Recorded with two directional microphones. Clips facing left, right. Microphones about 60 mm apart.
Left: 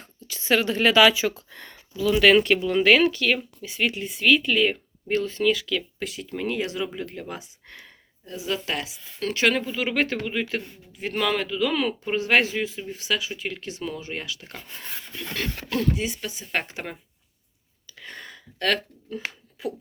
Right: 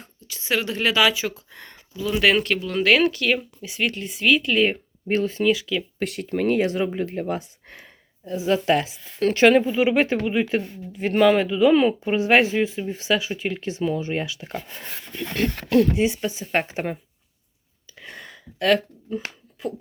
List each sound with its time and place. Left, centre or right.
0.3 s speech: centre
2.4 s speech: centre
4.6 s speech: right
6.0 s speech: right
6.6 s speech: right
7.7 s speech: right
8.9 s speech: right; by 10.6 s centre
10.6 s speech: right
15.4 s speech: right
16.0 s speech: right
18.0 s a sound: centre